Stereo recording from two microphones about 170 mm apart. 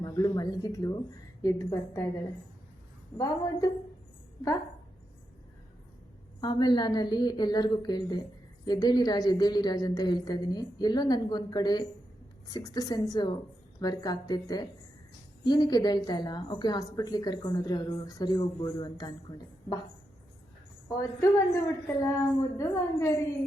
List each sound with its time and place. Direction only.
0.0 s a woman's voice: 20° left (ahead or behind)
6.4 s a woman's voice: 25° left (ahead or behind)
20.8 s a woman's voice: 20° left (ahead or behind)